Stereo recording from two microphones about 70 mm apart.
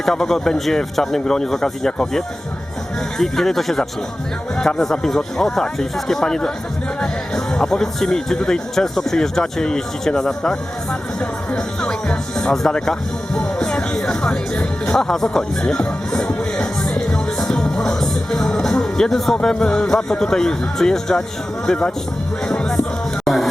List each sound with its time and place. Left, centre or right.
0.0 s speech: centre
22.4 s music: centre
23.2 s music: centre